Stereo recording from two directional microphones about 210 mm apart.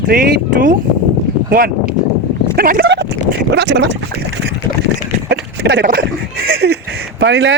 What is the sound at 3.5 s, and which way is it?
Speech, 55° right (ahead or behind).